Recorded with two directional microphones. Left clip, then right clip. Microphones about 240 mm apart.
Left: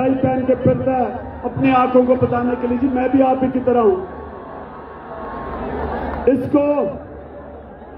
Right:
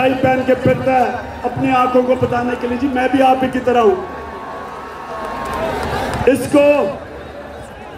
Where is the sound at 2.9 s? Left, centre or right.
Centre.